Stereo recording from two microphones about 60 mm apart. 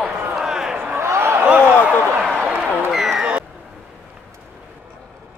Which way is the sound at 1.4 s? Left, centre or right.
Centre.